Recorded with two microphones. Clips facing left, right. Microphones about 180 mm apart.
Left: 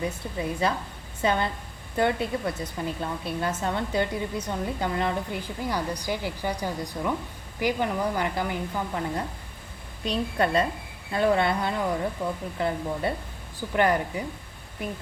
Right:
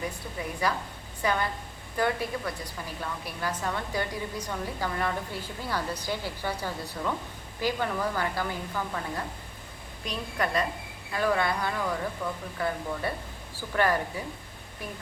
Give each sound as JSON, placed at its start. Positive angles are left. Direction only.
{"t": 0.0, "sound": "a woman's voice", "side_deg": 25}
{"t": 10.1, "sound": "a woman's voice", "side_deg": 30}